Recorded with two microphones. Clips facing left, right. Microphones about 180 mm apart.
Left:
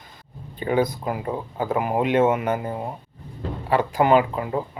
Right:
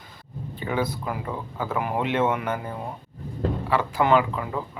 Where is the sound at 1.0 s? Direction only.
25° left (ahead or behind).